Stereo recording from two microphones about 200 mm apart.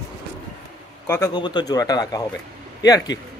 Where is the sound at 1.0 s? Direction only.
15° left (ahead or behind).